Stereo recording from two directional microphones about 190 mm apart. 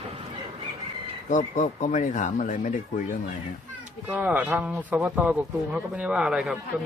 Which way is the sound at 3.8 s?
5° right (ahead or behind).